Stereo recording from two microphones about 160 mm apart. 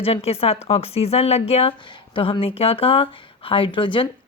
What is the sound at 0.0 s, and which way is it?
Speech, 40° left (ahead or behind).